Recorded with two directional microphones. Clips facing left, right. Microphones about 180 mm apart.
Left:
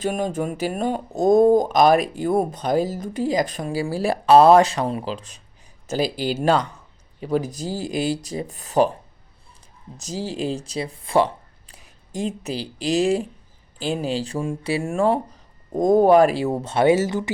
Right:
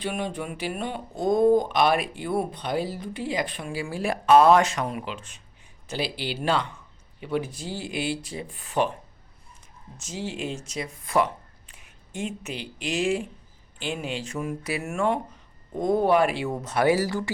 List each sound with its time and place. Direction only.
0.0 s speech: 45° left (ahead or behind)
10.0 s speech: 35° left (ahead or behind); by 17.3 s 20° left (ahead or behind)